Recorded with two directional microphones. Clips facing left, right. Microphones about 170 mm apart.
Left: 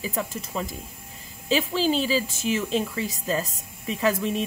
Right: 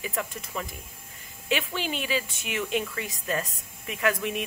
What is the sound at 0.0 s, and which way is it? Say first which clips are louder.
Speech: left 3 dB; 30° left (ahead or behind).